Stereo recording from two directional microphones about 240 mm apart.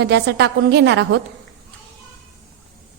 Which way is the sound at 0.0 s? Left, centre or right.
Right.